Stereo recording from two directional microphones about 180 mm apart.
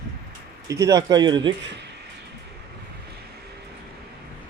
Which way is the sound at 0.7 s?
15° right (ahead or behind).